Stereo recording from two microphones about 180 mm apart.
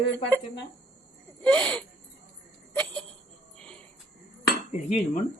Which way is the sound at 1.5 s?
5° left (ahead or behind).